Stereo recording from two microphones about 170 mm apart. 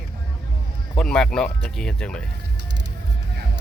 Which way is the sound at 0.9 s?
5° left (ahead or behind).